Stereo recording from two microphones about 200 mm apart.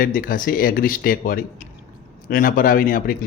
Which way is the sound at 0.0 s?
45° left (ahead or behind).